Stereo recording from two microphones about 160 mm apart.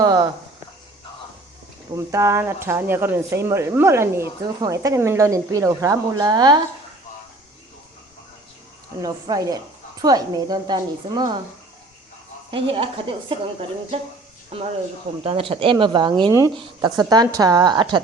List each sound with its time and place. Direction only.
0.0 s a sound: 25° right (ahead or behind)
2.0 s speech: 20° right (ahead or behind)
9.0 s speech: 25° right (ahead or behind)
12.5 s speech: 35° right (ahead or behind)
15.2 s speech: 35° right (ahead or behind)